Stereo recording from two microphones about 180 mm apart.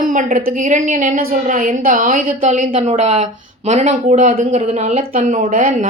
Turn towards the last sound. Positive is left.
turn(degrees=-45)  # may be behind; listen again after turning